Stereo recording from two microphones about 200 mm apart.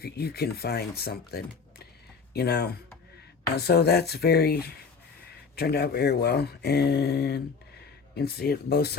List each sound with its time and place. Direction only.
0.0 s speech: 50° left (ahead or behind)